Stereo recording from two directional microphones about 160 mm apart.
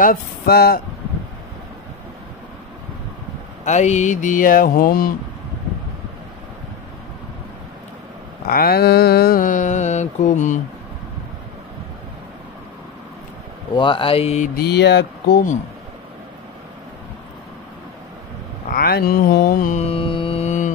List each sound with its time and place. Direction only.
0.0 s a sound: 70° left (ahead or behind)
3.6 s mantra: 45° left (ahead or behind); by 5.1 s 65° left (ahead or behind)
8.5 s mantra: 70° left (ahead or behind); by 10.6 s 50° left (ahead or behind)
13.7 s speech: 30° left (ahead or behind)
14.5 s speech: 85° left
18.7 s a sound: 75° left (ahead or behind)
19.8 s mantra: 35° left (ahead or behind)